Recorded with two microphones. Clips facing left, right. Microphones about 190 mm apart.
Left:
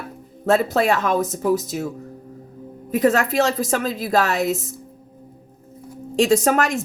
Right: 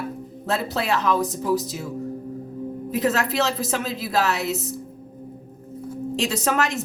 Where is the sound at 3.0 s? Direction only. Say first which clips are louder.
Left 5 dB; 45° left (ahead or behind).